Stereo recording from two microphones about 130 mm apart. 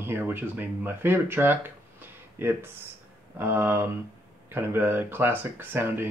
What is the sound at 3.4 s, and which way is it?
Speech, 15° right (ahead or behind).